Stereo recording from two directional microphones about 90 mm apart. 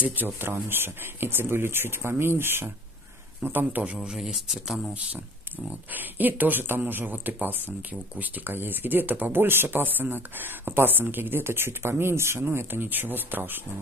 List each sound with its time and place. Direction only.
0.0 s speech: 20° right (ahead or behind); by 4.9 s 5° right (ahead or behind)
5.7 s speech: 20° right (ahead or behind)